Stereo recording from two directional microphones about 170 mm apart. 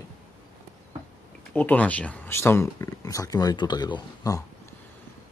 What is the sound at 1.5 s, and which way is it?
Speech, 10° left (ahead or behind).